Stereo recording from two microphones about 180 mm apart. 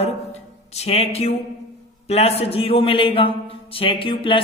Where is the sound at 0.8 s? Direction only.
35° left (ahead or behind).